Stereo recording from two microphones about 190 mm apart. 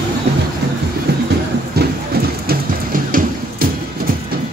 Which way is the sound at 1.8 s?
55° right (ahead or behind).